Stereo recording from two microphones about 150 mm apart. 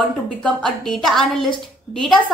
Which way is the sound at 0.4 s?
5° left (ahead or behind).